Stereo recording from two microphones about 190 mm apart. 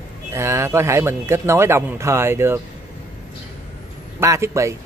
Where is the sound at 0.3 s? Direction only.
15° right (ahead or behind).